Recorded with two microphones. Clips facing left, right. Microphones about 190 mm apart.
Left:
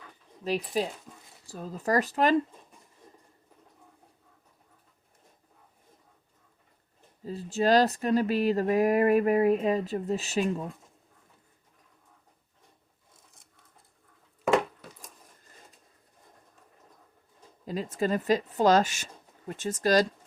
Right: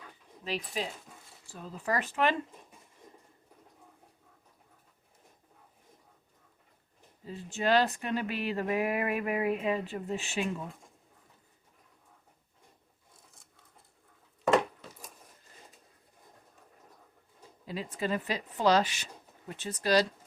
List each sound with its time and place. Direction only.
0.4 s speech: 40° left (ahead or behind)
7.3 s speech: 40° left (ahead or behind)
17.7 s speech: 45° left (ahead or behind)